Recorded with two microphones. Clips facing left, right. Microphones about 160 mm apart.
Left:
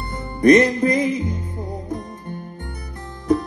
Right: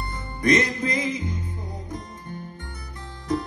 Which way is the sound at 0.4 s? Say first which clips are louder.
Left 9 dB; 50° left (ahead or behind).